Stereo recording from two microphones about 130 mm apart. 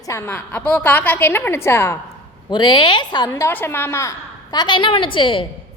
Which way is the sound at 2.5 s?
35° left (ahead or behind).